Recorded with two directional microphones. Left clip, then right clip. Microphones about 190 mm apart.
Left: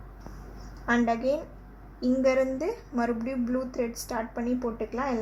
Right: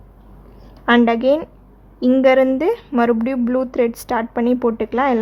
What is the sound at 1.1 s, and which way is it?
Speech, 35° right (ahead or behind).